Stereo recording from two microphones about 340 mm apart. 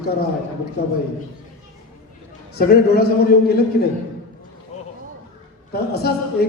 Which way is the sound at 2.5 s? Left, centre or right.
Left.